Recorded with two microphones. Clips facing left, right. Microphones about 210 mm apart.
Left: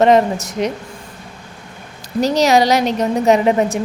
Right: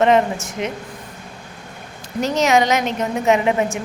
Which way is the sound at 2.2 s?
35° left (ahead or behind).